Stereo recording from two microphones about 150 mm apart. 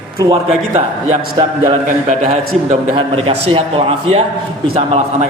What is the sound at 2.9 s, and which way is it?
A man's voice, 40° right (ahead or behind).